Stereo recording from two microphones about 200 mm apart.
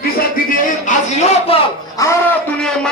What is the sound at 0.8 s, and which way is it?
Speech, 30° left (ahead or behind).